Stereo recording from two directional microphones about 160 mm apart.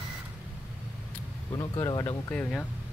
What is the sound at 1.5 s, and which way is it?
Speech, 25° left (ahead or behind).